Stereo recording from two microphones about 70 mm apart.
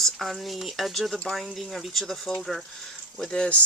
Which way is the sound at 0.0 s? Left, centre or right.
Centre.